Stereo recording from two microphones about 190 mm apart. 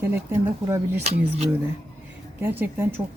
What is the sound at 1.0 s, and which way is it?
Speech, 35° right (ahead or behind).